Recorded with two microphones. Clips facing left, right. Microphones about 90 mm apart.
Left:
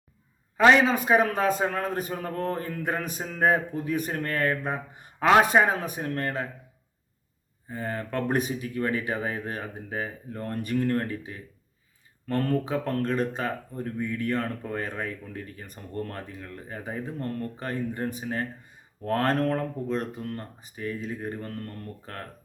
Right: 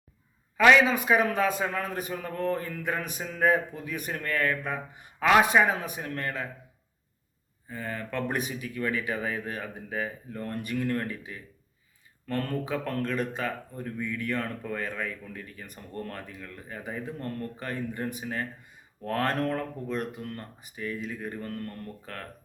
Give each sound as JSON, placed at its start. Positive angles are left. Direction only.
{"t": 0.5, "sound": "a man's voice", "side_deg": 35}
{"t": 7.7, "sound": "a man's voice", "side_deg": 35}